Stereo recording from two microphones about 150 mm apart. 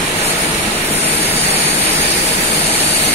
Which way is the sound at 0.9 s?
45° left (ahead or behind).